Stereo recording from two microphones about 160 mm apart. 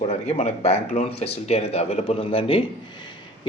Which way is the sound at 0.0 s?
40° left (ahead or behind).